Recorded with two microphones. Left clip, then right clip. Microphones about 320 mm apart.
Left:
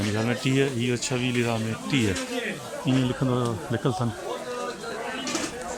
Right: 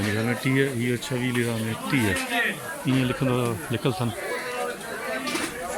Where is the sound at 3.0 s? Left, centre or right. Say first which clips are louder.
Right 1 dB; centre.